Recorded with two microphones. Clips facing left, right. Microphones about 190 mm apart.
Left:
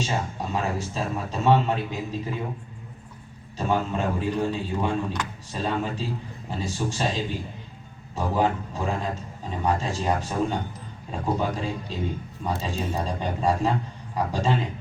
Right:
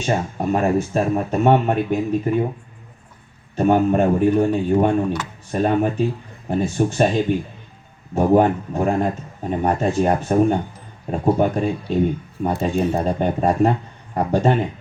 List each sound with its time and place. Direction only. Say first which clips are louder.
0.0 s a man's voice: right 7 dB; 60° right (ahead or behind)
3.5 s a man's voice: right 10 dB; 55° right (ahead or behind)